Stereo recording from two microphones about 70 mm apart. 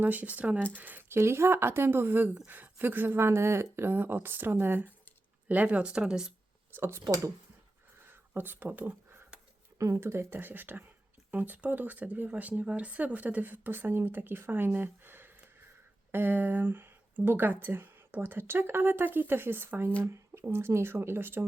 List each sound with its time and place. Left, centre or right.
0.0 s speech: right
1.0 s a woman's voice: right; by 6.3 s centre
6.7 s speech: right
8.0 s a sound: right
9.9 s speech: right